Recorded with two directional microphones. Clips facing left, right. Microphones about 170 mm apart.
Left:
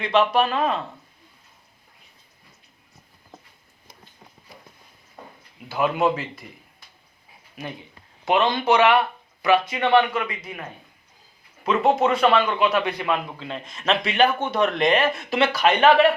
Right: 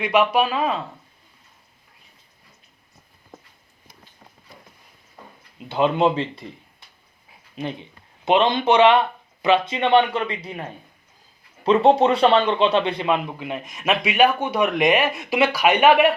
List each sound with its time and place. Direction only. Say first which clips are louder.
0.0 s a man's voice: right 1 dB; 15° right (ahead or behind)
5.5 s a man's voice: right 3 dB; 25° right (ahead or behind)